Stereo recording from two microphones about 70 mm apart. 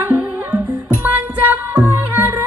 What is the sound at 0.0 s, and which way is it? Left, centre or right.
Music, right.